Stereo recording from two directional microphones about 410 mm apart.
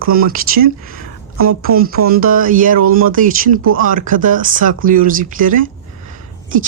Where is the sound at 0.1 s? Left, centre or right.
Right.